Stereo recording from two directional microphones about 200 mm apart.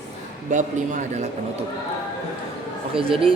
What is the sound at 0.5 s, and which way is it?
Speech, 40° right (ahead or behind).